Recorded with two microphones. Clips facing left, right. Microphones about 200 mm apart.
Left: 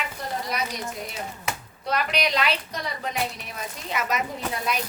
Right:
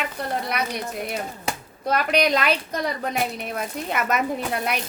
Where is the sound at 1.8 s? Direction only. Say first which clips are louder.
Right 5 dB; 50° right (ahead or behind).